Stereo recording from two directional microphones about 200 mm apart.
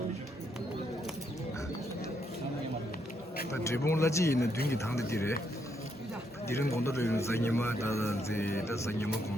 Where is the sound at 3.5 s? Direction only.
15° left (ahead or behind).